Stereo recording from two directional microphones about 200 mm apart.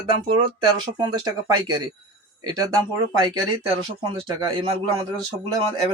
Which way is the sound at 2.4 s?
20° right (ahead or behind).